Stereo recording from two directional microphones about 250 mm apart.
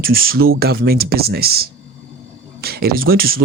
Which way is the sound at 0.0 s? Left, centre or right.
Right.